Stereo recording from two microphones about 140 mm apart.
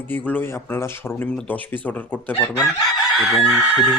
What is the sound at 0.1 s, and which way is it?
Speech, 10° left (ahead or behind).